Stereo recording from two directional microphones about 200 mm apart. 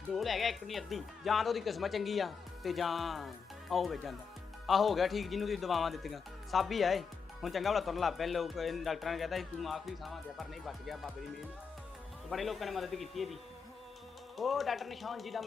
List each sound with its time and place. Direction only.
0.1 s speech: centre (ahead or behind)
14.3 s speech: centre (ahead or behind)